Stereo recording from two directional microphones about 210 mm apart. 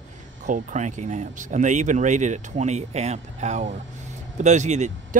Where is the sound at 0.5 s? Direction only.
35° right (ahead or behind).